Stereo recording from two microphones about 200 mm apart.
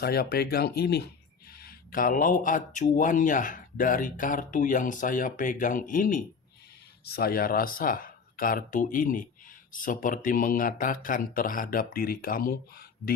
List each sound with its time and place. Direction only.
0.0 s speech: 50° left (ahead or behind)